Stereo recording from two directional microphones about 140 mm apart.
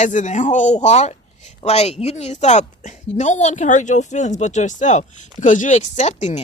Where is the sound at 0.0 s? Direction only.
60° left (ahead or behind).